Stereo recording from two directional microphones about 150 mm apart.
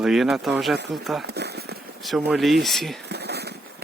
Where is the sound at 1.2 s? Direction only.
90° right.